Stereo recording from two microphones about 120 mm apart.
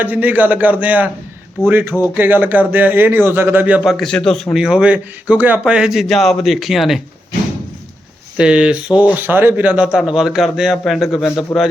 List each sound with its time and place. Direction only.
0.0 s speech: 15° right (ahead or behind)
3.9 s speech: 5° left (ahead or behind)
8.4 s speech: 10° right (ahead or behind)